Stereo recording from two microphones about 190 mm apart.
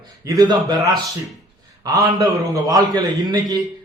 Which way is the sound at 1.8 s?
15° right (ahead or behind).